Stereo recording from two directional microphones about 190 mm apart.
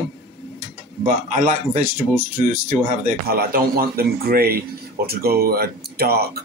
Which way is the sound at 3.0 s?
50° right (ahead or behind).